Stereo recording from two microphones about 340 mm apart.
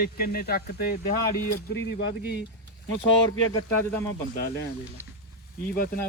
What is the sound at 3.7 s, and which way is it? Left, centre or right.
Speech, centre.